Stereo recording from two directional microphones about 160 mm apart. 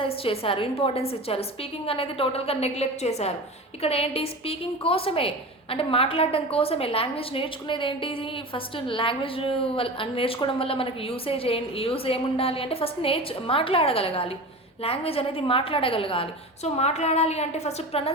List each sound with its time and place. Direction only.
0.0 s a woman's voice: 35° left (ahead or behind)